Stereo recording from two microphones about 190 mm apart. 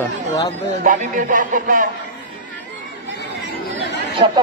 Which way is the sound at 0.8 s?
45° right (ahead or behind).